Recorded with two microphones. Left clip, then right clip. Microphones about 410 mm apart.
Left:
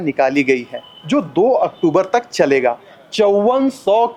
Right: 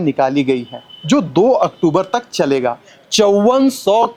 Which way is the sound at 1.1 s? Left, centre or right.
Right.